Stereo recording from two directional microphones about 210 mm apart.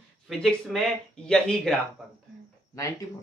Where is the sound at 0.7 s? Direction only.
5° left (ahead or behind).